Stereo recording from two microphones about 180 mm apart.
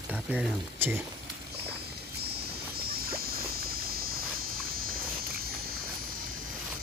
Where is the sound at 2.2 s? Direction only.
60° right (ahead or behind).